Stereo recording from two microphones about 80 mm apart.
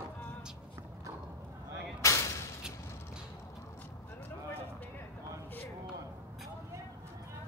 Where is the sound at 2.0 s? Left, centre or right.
Left.